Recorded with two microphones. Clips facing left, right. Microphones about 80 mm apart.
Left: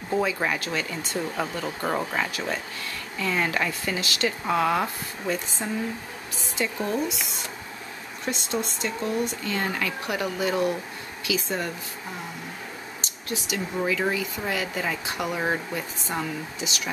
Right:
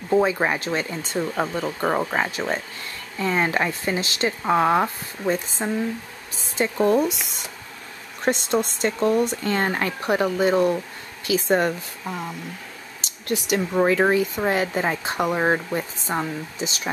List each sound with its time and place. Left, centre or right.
0.2 s speech: right
6.6 s speech: right
8.3 s speech: right
11.2 s speech: right
13.3 s speech: right